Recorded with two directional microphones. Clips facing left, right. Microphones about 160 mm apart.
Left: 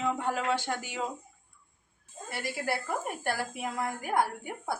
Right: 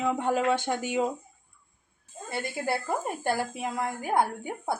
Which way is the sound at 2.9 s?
30° right (ahead or behind).